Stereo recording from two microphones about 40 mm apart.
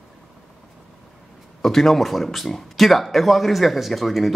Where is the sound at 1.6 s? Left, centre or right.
Centre.